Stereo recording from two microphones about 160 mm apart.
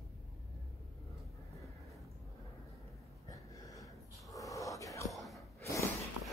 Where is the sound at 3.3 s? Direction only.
20° left (ahead or behind).